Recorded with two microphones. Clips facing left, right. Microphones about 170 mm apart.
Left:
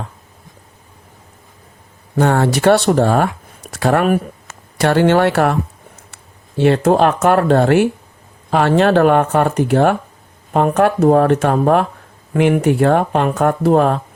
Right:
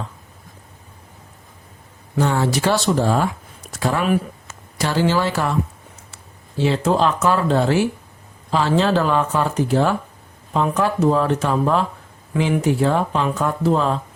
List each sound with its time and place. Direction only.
2.1 s speech: 60° left (ahead or behind)
6.6 s speech: 60° left (ahead or behind)